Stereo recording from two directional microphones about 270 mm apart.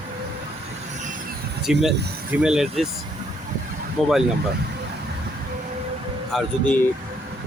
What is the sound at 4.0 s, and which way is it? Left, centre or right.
Speech, centre.